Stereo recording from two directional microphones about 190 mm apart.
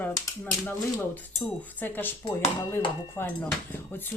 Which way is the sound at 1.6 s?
10° left (ahead or behind).